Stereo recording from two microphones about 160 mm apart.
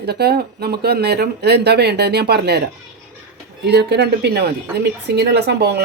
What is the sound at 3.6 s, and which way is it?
Speech, 90° right.